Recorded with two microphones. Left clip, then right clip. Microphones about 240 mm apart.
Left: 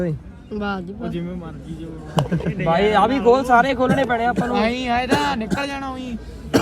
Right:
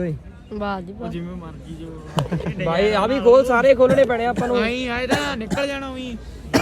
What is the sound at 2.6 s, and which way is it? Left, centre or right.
A man's voice, centre.